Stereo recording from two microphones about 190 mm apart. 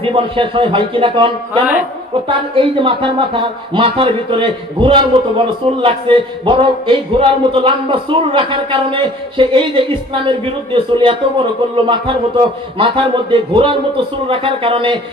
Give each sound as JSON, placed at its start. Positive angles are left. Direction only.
{"t": 0.0, "sound": "speech", "side_deg": -25}